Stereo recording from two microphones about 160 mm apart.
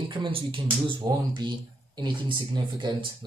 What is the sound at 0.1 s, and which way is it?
Speech, 30° right (ahead or behind).